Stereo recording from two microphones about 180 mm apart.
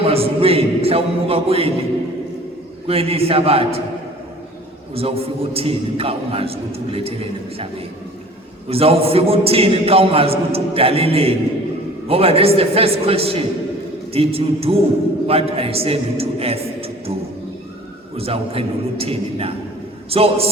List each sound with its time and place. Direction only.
0.0 s a sound: 30° right (ahead or behind)
2.8 s a man's voice: 35° right (ahead or behind)
4.9 s a man's voice: 35° right (ahead or behind)
8.7 s a man's voice: 35° right (ahead or behind)
18.2 s a man's voice: 35° right (ahead or behind)